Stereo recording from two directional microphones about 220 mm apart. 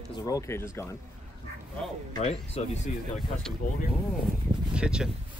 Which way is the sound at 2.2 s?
30° left (ahead or behind).